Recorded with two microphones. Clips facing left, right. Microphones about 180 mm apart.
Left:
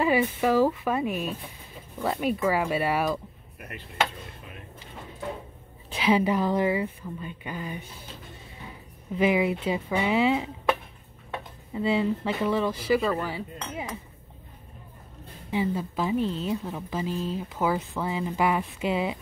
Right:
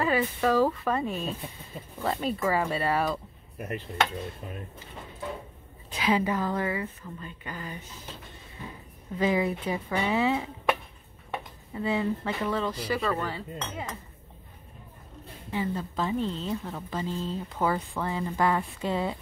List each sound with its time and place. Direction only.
0.0 s speech: 10° left (ahead or behind)
6.0 s speech: 15° left (ahead or behind)
9.1 s speech: 15° left (ahead or behind)
11.7 s speech: 15° left (ahead or behind)
15.5 s speech: 10° left (ahead or behind)